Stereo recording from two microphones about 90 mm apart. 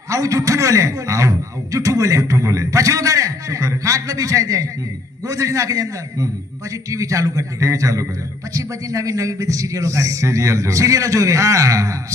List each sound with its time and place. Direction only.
0.1 s a man's voice: 40° right (ahead or behind)